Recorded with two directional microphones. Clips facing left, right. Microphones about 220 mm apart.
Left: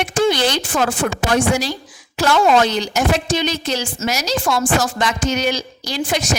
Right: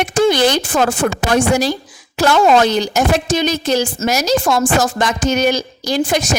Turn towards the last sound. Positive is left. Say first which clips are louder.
# right 5 dB
turn(degrees=-45)  # may be behind; listen again after turning